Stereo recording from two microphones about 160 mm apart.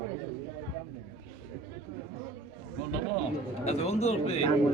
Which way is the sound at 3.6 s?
40° left (ahead or behind).